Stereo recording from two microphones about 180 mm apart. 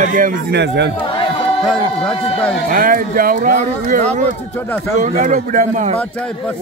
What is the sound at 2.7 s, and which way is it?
Speech, 50° right (ahead or behind).